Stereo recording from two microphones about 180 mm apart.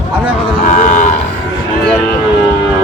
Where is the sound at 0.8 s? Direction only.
45° left (ahead or behind).